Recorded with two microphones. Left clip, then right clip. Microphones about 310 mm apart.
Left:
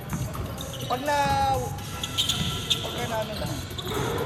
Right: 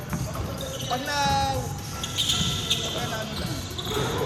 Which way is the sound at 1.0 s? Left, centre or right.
Centre.